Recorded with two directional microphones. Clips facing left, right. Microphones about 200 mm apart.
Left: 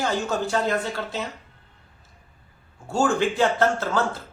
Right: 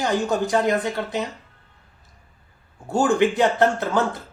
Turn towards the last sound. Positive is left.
turn(degrees=-15)  # may be behind; listen again after turning